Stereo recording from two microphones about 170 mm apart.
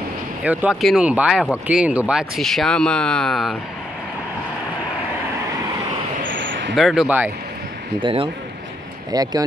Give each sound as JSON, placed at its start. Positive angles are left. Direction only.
{"t": 0.4, "sound": "speech", "side_deg": -5}
{"t": 6.3, "sound": "a sound", "side_deg": -90}
{"t": 6.7, "sound": "speech", "side_deg": 0}
{"t": 8.0, "sound": "speech", "side_deg": -30}